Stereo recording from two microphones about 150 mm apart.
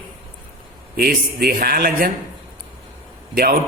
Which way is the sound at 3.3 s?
75° right (ahead or behind).